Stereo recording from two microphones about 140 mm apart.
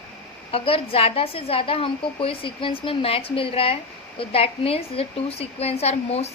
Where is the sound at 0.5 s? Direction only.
40° left (ahead or behind).